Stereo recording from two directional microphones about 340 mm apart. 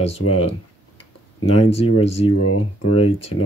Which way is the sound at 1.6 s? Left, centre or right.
Centre.